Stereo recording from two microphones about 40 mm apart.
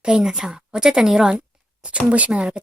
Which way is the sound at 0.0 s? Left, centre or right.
Right.